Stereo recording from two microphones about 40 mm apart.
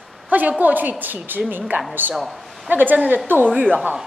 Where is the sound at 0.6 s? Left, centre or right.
Right.